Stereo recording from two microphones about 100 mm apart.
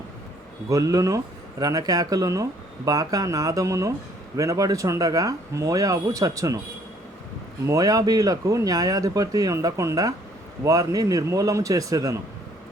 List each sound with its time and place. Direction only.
0.7 s speech: 35° right (ahead or behind)
7.7 s speech: 35° right (ahead or behind)